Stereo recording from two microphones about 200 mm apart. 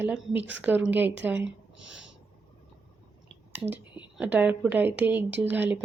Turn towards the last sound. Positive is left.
turn(degrees=-10)  # may be behind; listen again after turning